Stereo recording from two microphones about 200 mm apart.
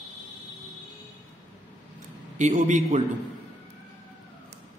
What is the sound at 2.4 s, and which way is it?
Speech, 35° right (ahead or behind).